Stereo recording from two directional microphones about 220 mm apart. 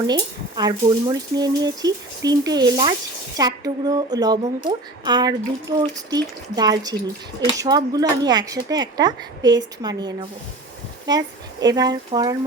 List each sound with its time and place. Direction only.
0.1 s speech: 20° right (ahead or behind)